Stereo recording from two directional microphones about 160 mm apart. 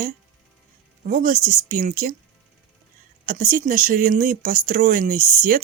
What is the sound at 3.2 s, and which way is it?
Speech, 60° right (ahead or behind).